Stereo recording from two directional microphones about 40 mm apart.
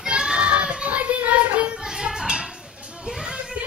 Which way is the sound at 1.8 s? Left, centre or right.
Centre.